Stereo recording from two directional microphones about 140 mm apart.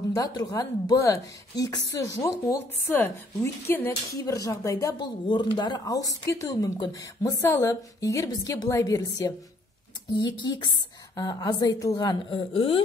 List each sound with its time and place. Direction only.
0.1 s speech: 25° left (ahead or behind)